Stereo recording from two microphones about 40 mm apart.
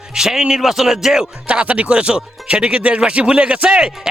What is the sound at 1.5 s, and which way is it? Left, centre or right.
Speech, right.